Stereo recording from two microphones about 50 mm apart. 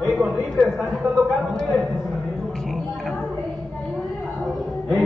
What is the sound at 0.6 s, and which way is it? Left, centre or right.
Speech, centre.